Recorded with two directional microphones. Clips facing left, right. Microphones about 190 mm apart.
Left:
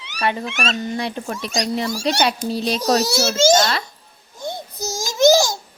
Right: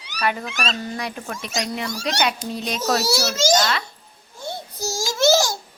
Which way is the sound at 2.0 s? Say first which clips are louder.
Left 3 dB; 35° left (ahead or behind).